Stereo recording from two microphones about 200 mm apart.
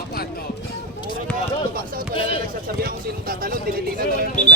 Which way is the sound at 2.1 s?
25° left (ahead or behind).